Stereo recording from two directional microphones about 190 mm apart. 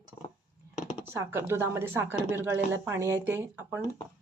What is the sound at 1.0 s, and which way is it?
Speech, 10° right (ahead or behind).